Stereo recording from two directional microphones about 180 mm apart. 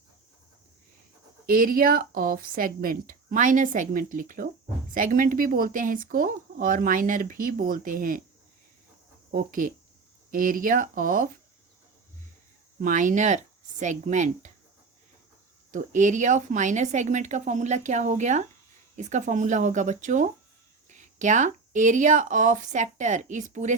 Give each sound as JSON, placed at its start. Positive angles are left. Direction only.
{"t": 1.5, "sound": "speech", "side_deg": -50}
{"t": 9.3, "sound": "speech", "side_deg": -50}
{"t": 12.8, "sound": "speech", "side_deg": -45}
{"t": 15.7, "sound": "speech", "side_deg": -45}